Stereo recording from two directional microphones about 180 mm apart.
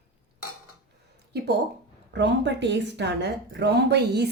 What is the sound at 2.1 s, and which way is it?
A woman's voice, 75° right (ahead or behind).